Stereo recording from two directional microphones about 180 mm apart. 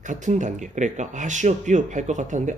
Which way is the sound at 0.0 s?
45° right (ahead or behind).